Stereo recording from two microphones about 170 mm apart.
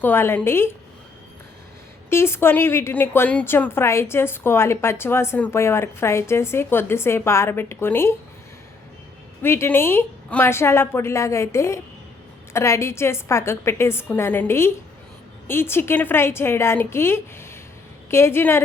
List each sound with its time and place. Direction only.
0.0 s a woman's voice: 15° left (ahead or behind)
2.0 s a woman's voice: 15° left (ahead or behind)
9.4 s a woman's voice: 15° left (ahead or behind)